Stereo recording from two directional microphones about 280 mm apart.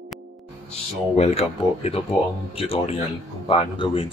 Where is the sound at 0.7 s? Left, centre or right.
Left.